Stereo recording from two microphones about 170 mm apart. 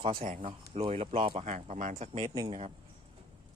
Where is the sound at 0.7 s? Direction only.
35° right (ahead or behind).